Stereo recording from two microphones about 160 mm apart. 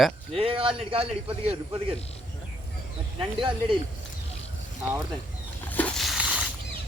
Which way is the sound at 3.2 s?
30° right (ahead or behind).